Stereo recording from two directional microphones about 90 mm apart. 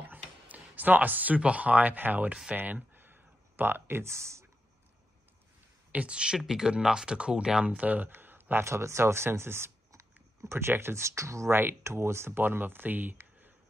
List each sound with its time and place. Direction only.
0.1 s speech: 20° right (ahead or behind)
2.5 s a sound: 20° right (ahead or behind)
5.9 s speech: 15° right (ahead or behind)